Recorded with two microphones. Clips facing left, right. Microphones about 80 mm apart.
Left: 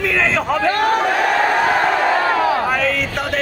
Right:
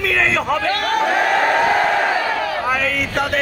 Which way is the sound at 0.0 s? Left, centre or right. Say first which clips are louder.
Even; centre.